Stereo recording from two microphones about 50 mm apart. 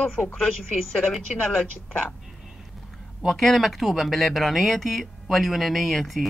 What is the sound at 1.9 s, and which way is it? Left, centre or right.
Speech, left.